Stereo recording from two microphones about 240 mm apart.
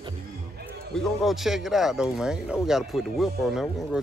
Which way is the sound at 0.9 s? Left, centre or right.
Centre.